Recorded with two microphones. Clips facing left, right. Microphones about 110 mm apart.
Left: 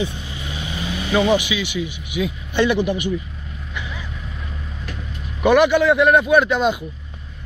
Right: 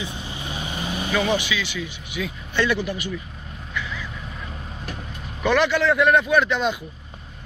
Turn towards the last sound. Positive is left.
turn(degrees=10)  # may be behind; listen again after turning